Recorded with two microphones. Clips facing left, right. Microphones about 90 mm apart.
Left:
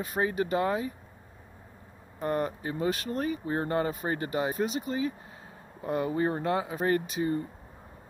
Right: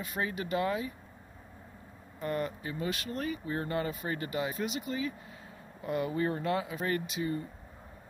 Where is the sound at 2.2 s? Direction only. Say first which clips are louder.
Left 4 dB; 35° left (ahead or behind).